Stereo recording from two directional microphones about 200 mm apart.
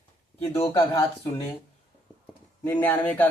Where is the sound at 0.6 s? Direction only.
20° left (ahead or behind).